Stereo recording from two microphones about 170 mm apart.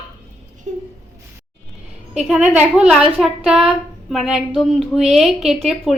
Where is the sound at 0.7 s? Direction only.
45° right (ahead or behind).